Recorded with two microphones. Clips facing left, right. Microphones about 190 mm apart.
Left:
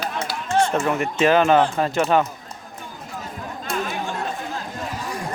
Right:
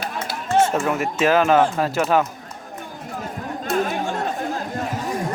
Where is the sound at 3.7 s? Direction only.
45° right (ahead or behind).